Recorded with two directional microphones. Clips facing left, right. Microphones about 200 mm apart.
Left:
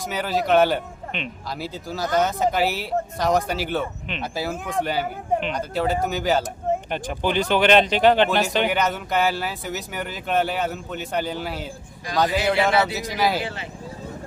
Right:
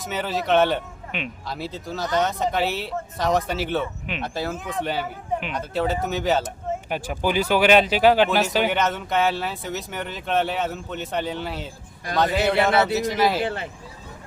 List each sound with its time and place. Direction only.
0.1 s speech: centre (ahead or behind)
13.4 s speech: 55° right (ahead or behind)